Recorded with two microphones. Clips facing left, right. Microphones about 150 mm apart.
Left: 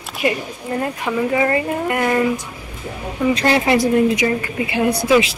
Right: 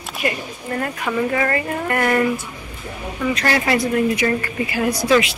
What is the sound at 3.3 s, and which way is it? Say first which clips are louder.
Speech: left 3 dB; 25° left (ahead or behind).